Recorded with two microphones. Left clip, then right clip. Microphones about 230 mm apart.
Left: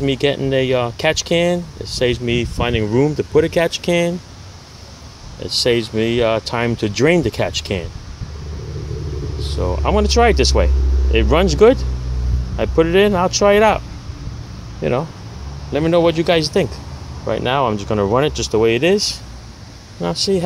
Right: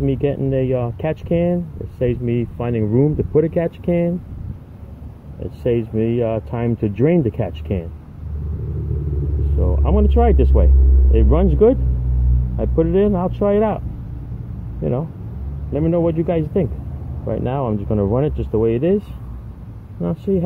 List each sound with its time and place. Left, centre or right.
0.0 s speech: centre
5.6 s speech: centre
9.8 s speech: centre
15.7 s speech: centre